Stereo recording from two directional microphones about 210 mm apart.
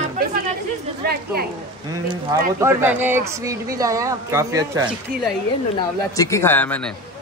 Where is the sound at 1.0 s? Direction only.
45° right (ahead or behind).